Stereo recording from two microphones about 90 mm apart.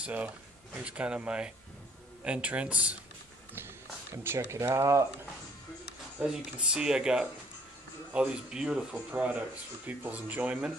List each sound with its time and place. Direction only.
0.0 s speech: 15° right (ahead or behind)
4.1 s speech: 30° right (ahead or behind)
6.2 s speech: 10° right (ahead or behind)